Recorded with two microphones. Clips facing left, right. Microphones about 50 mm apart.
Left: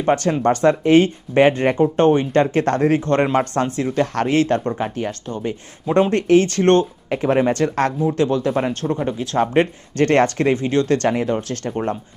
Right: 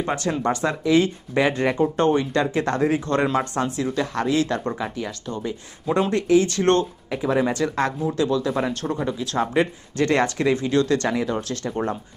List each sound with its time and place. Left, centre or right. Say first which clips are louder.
0.0 s speech: left 6 dB; left
6.6 s speech: left 4 dB; left
7.1 s speech: left 4 dB; left